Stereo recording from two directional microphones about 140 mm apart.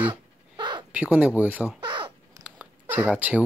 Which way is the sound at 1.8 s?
35° right (ahead or behind).